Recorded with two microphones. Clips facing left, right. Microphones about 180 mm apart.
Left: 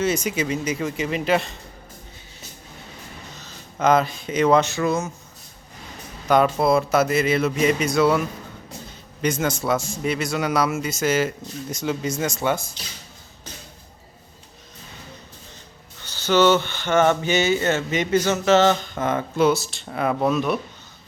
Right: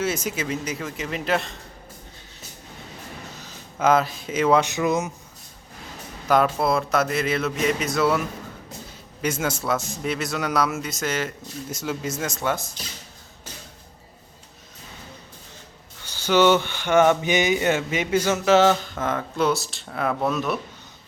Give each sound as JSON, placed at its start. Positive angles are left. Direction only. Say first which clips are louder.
{"t": 0.0, "sound": "a man's voice", "louder": "left 3 dB", "side_deg": -5}
{"t": 3.4, "sound": "speech", "louder": "left 1 dB", "side_deg": -5}
{"t": 4.7, "sound": "speech", "louder": "even", "side_deg": -20}
{"t": 6.2, "sound": "a man's voice", "louder": "left 2 dB", "side_deg": 0}
{"t": 9.2, "sound": "a man's voice", "louder": "left 3 dB", "side_deg": -5}
{"t": 16.0, "sound": "speech", "louder": "left 1 dB", "side_deg": -10}